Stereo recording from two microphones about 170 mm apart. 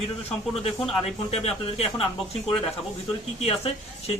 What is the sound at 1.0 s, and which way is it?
Speech, 35° left (ahead or behind).